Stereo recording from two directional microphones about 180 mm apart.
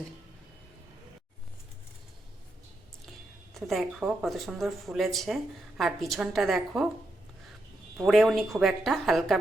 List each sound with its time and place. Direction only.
3.5 s speech: centre (ahead or behind)
8.0 s speech: centre (ahead or behind)